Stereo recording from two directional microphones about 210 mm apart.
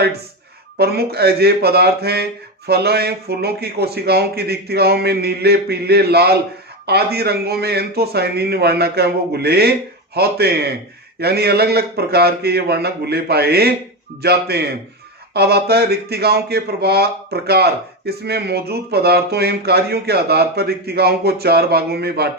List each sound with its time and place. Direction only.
0.8 s speech: 50° right (ahead or behind)